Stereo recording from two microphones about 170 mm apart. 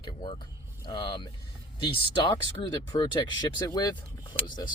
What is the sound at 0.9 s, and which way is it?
Speech, 25° left (ahead or behind).